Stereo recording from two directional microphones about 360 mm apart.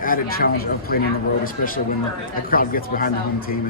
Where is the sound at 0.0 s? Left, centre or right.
Left.